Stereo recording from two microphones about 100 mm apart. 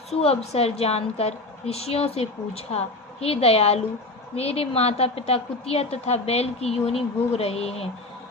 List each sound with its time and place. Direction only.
0.1 s a woman's voice: 90° left